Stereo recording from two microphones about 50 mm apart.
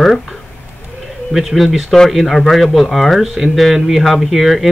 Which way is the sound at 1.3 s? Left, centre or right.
Centre.